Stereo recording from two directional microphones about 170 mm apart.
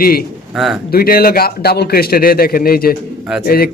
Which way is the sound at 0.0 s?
60° left (ahead or behind).